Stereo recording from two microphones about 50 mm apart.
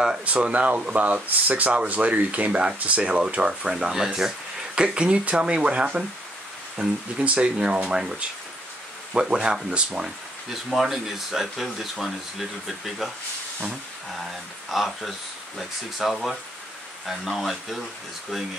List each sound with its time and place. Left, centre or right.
0.2 s speech: right
7.9 s speech: centre
10.5 s speech: centre
14.1 s speech: centre